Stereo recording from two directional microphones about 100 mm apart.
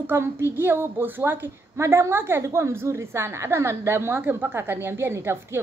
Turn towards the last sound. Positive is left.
turn(degrees=-25)  # may be behind; listen again after turning